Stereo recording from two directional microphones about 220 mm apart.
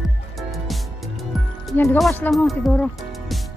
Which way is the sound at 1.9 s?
5° left (ahead or behind).